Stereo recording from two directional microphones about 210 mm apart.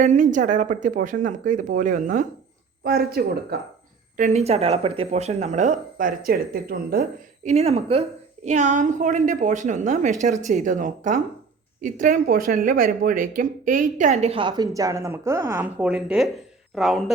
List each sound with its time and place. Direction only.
0.0 s speech: 35° right (ahead or behind)
4.2 s speech: 30° right (ahead or behind)
7.4 s a woman's voice: 30° right (ahead or behind); by 17.0 s centre (ahead or behind)